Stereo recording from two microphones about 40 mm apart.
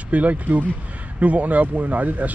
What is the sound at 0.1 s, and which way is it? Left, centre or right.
Speech, right.